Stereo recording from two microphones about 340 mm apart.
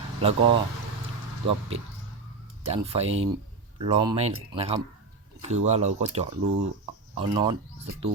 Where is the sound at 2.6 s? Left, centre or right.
Centre.